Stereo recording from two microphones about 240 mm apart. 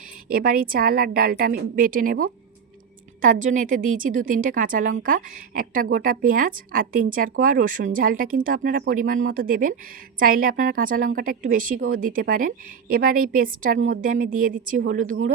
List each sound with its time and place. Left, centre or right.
0.3 s a woman's voice: right